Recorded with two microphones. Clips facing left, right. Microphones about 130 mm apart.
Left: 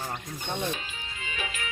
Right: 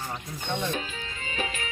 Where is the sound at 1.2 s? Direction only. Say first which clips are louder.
Right 3 dB; 35° right (ahead or behind).